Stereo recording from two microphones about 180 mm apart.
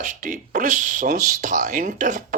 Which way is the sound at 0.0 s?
45° right (ahead or behind).